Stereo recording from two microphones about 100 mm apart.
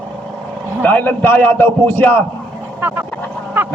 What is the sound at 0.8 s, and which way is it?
A man's voice, 15° left (ahead or behind).